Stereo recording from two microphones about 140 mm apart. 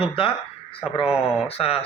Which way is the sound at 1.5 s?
45° left (ahead or behind).